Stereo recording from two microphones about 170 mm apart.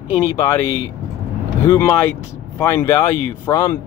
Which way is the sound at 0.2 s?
15° left (ahead or behind).